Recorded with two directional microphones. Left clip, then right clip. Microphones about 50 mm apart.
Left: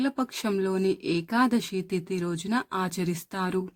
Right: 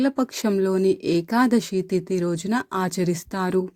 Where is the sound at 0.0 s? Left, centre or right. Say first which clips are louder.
Right 6 dB; right.